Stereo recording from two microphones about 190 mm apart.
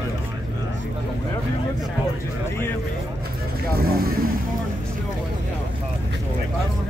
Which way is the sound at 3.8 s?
50° right (ahead or behind).